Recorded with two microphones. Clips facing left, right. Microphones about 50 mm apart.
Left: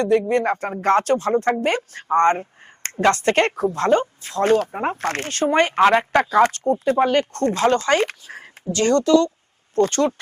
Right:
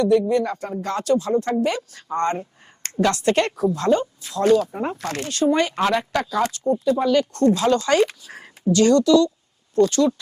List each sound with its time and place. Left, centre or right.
0.0 s a woman's voice: left